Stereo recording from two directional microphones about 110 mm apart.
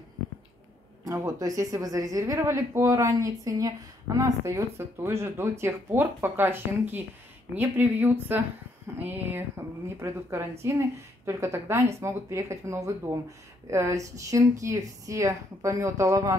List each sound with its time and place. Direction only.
1.0 s speech: 30° right (ahead or behind)